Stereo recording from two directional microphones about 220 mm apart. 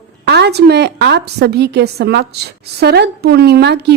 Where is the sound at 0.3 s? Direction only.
50° right (ahead or behind).